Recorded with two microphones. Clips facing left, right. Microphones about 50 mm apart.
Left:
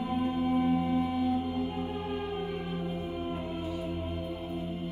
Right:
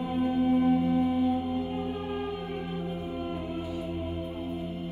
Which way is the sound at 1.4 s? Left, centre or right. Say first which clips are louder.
Right 1 dB; centre.